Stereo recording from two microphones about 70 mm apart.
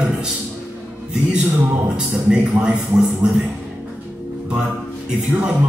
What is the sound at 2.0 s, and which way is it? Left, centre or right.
Speech, centre.